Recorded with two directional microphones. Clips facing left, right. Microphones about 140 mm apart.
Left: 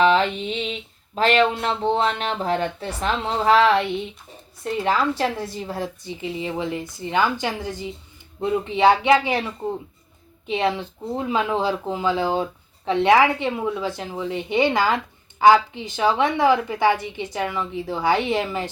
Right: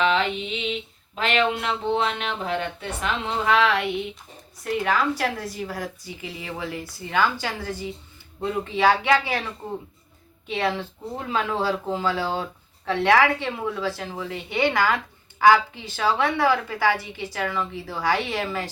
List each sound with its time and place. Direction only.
0.0 s a sound: 40° left (ahead or behind)
1.1 s speech: 35° left (ahead or behind); by 9.4 s 20° left (ahead or behind)
10.4 s a woman's voice: 20° left (ahead or behind)